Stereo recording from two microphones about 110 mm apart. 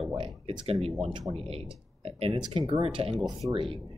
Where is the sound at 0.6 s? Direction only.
65° right (ahead or behind).